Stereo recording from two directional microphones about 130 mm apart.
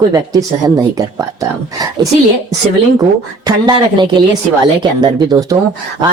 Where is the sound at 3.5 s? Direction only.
35° right (ahead or behind).